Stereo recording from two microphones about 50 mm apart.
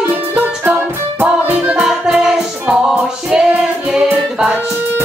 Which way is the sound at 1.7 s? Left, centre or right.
Centre.